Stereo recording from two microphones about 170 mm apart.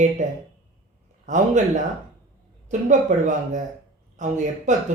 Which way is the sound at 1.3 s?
45° right (ahead or behind).